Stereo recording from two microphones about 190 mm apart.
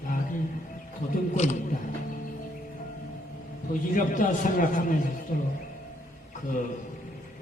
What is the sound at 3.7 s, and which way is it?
A man's voice, 45° left (ahead or behind).